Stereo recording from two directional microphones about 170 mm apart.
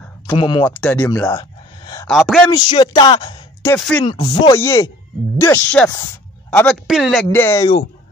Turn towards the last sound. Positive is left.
turn(degrees=15)  # may be behind; listen again after turning